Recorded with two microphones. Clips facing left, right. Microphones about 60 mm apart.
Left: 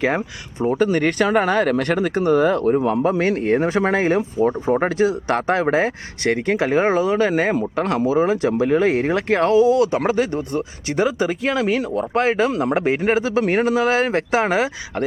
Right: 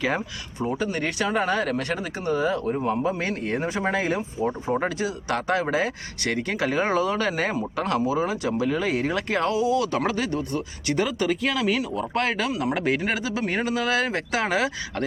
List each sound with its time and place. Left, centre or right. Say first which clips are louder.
0.0 s speech: left 5 dB; left
0.9 s speech: left 7 dB; left
7.8 s speech: left 4 dB; left
12.1 s speech: left 8 dB; left
12.5 s speech: left 5 dB; left
12.7 s speech: left 6 dB; left